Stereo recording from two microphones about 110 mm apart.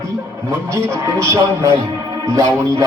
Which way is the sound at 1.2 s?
25° right (ahead or behind).